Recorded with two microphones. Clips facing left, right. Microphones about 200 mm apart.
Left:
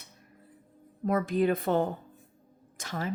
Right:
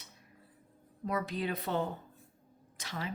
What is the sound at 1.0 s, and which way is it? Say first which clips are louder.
Speech: left 9 dB; 50° left (ahead or behind).